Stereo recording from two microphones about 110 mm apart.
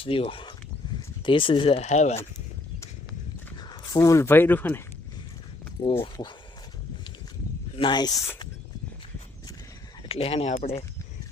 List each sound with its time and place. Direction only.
0.0 s speech: 55° left (ahead or behind)
1.8 s speech: 90° left
3.6 s speech: 35° left (ahead or behind); by 4.8 s 15° left (ahead or behind)
5.8 s speech: 60° left (ahead or behind)
7.8 s speech: 45° left (ahead or behind)
10.1 s speech: 60° left (ahead or behind)